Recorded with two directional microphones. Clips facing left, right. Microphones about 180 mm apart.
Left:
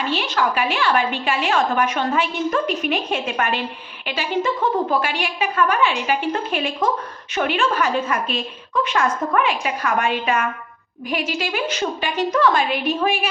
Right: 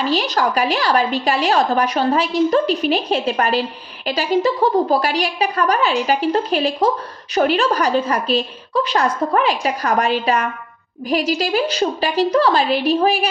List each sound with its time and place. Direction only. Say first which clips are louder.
0.0 s a woman's voice: right 3 dB; 40° right (ahead or behind)